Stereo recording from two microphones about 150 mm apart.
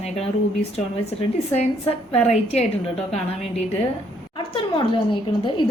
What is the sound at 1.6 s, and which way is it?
Speech, 40° left (ahead or behind).